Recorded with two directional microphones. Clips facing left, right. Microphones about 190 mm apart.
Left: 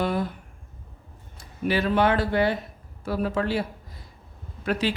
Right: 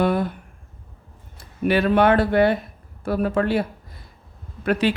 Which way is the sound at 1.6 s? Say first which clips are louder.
Right 5 dB; 60° right (ahead or behind).